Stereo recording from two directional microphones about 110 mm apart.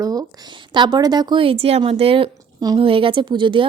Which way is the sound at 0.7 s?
40° right (ahead or behind).